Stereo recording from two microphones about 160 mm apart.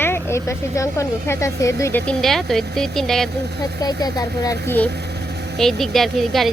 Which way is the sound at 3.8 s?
25° left (ahead or behind).